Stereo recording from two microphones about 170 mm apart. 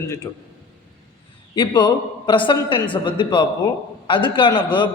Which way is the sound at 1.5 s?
25° left (ahead or behind).